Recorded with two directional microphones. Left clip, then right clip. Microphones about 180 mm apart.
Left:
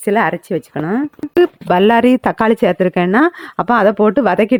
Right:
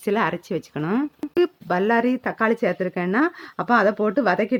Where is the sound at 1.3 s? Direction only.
35° left (ahead or behind).